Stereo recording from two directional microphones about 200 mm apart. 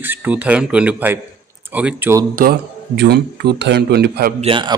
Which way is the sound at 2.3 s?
50° right (ahead or behind).